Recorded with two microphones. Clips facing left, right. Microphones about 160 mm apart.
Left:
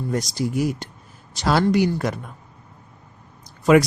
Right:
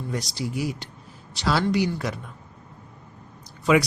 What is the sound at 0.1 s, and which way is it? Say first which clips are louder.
Speech: left 6 dB; 45° left (ahead or behind).